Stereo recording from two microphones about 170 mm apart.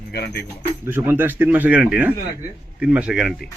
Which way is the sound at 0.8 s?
15° right (ahead or behind).